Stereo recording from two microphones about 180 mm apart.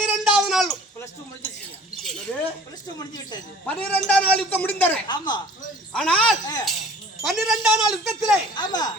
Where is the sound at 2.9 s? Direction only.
20° left (ahead or behind).